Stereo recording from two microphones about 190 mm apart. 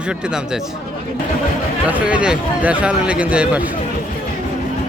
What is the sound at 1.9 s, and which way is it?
Speech, 5° right (ahead or behind).